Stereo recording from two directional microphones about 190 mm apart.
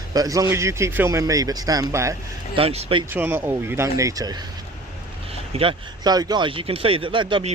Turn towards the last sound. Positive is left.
turn(degrees=-25)  # may be behind; listen again after turning